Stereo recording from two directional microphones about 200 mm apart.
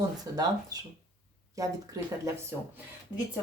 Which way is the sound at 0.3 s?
20° right (ahead or behind).